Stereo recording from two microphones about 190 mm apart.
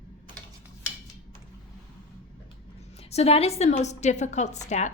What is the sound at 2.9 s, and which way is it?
A woman's voice, 35° left (ahead or behind).